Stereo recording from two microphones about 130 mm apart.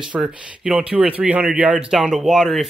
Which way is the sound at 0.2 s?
5° right (ahead or behind).